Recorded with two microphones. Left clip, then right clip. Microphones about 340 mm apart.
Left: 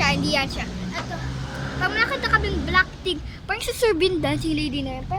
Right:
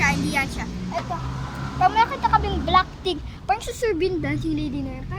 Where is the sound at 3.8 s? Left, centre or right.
Centre.